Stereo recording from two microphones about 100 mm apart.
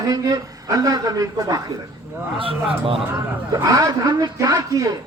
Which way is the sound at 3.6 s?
35° right (ahead or behind).